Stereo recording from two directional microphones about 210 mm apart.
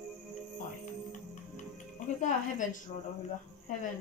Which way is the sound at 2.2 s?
35° left (ahead or behind).